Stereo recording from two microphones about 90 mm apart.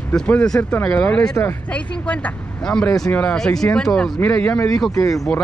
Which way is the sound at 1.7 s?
15° left (ahead or behind).